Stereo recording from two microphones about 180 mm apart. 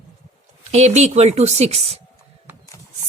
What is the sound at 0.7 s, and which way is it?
Speech, 40° right (ahead or behind).